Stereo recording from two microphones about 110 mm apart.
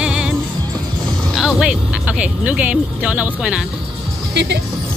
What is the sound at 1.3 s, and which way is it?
Speech, 5° right (ahead or behind).